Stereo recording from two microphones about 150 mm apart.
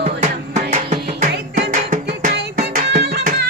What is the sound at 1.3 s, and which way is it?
Music, 90° right.